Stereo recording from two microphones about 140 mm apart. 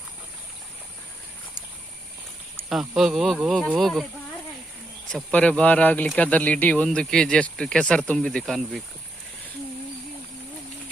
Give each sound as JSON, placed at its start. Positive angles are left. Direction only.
{"t": 2.6, "sound": "speech", "side_deg": 0}
{"t": 5.0, "sound": "speech", "side_deg": 5}